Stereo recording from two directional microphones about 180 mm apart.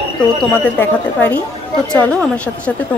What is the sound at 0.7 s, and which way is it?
A woman's voice, 10° left (ahead or behind).